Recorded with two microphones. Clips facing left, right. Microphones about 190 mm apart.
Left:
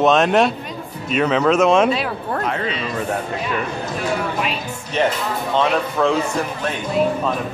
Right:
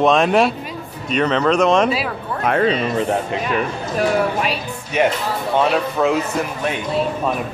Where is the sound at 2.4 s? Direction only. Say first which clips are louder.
Right 11 dB; 55° right (ahead or behind).